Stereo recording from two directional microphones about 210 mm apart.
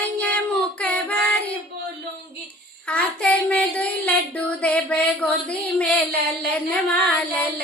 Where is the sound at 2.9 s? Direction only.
5° left (ahead or behind).